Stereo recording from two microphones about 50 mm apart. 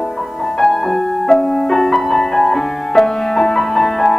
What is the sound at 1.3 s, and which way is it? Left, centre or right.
Music, centre.